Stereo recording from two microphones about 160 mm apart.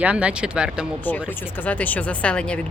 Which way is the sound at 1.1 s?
10° left (ahead or behind).